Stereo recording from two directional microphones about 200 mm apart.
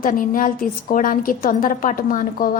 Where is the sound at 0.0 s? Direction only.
45° left (ahead or behind).